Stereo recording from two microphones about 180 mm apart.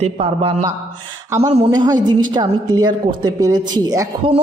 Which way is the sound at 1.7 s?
25° right (ahead or behind).